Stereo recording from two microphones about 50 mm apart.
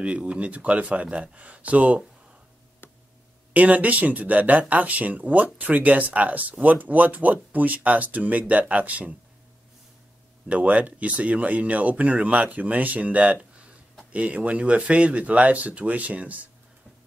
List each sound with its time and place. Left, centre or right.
0.0 s speech: right
2.8 s tick: left
3.5 s speech: right
10.5 s speech: right